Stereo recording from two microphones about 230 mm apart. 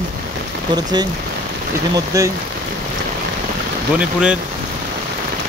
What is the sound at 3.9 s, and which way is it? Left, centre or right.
Speech, centre.